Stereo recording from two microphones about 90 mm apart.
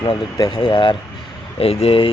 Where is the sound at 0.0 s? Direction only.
50° left (ahead or behind).